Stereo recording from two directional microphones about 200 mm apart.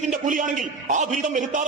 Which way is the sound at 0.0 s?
40° right (ahead or behind).